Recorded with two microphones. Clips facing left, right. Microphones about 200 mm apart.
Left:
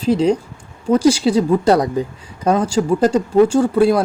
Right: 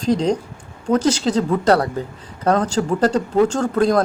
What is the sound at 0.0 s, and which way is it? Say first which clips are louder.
A woman's voice: left 3 dB; 5° left (ahead or behind).